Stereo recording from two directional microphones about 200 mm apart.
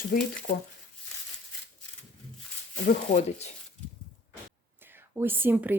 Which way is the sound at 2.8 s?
40° left (ahead or behind).